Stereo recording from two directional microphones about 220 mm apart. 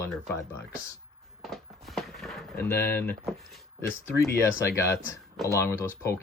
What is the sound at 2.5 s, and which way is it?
Speech, 10° left (ahead or behind).